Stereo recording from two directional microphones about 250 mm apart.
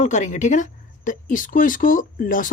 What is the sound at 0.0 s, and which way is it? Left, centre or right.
Speech, left.